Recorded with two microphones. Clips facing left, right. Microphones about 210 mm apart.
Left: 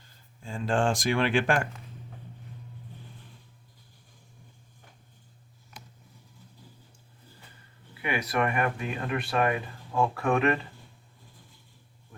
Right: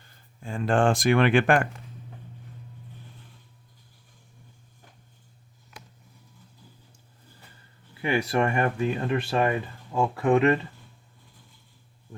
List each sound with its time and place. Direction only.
0.0 s speech: 60° right (ahead or behind)
8.0 s speech: 30° right (ahead or behind)
9.9 s speech: 20° right (ahead or behind)